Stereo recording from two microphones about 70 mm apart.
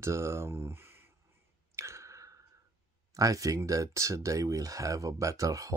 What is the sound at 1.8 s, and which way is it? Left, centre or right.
Clicking, right.